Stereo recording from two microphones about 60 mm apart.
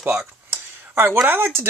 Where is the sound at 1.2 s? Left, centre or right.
Right.